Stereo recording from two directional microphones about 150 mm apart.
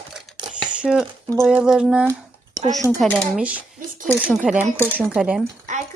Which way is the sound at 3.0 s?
5° left (ahead or behind).